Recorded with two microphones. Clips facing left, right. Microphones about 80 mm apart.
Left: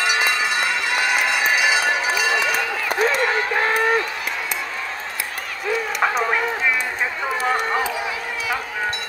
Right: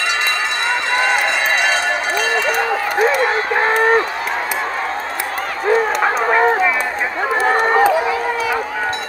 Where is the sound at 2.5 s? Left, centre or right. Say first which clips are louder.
Right 5 dB; right.